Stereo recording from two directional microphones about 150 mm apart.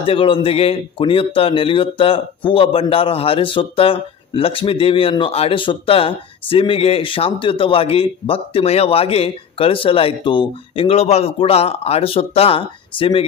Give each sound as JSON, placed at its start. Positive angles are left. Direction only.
{"t": 0.0, "sound": "a man's voice", "side_deg": 35}